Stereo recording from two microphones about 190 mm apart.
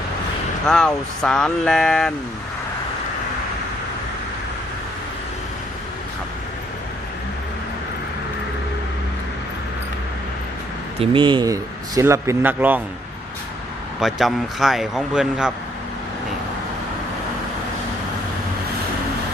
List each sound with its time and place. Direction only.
0.7 s speech: 5° left (ahead or behind)
11.0 s speech: 25° right (ahead or behind); by 12.8 s 10° right (ahead or behind)
14.0 s speech: centre (ahead or behind)